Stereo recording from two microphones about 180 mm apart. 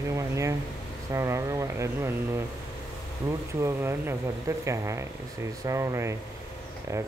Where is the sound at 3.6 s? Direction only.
15° right (ahead or behind).